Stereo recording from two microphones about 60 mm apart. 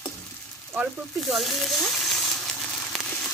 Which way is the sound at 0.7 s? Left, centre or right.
Right.